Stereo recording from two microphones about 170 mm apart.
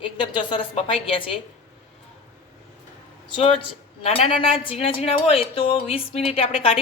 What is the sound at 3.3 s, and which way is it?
Speech, 35° left (ahead or behind).